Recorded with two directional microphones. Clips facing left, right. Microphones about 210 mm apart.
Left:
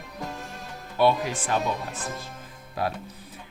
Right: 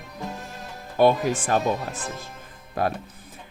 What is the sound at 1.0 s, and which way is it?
Speech, 45° right (ahead or behind).